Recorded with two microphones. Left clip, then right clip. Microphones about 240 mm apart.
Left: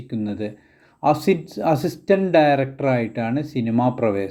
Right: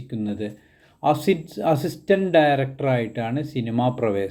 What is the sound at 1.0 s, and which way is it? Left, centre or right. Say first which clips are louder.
Speech: left 2 dB; centre.